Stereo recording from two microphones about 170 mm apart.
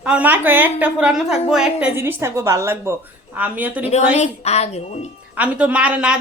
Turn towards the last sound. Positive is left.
turn(degrees=-5)  # may be behind; listen again after turning